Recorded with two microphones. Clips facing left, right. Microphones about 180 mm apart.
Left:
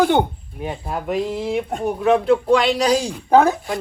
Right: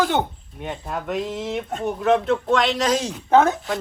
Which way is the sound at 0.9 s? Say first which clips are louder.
Left 3 dB; 5° left (ahead or behind).